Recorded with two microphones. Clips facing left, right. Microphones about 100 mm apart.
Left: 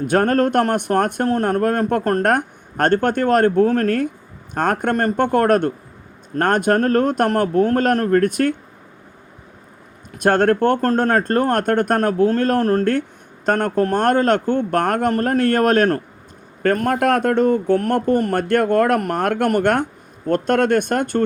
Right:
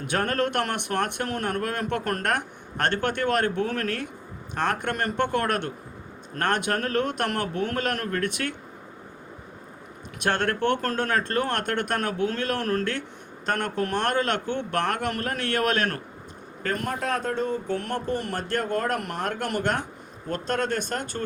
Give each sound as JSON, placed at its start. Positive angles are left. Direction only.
{"t": 0.1, "sound": "speech", "side_deg": 45}
{"t": 10.2, "sound": "speech", "side_deg": 45}